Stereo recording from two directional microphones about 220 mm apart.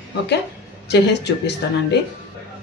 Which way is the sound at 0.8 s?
50° left (ahead or behind).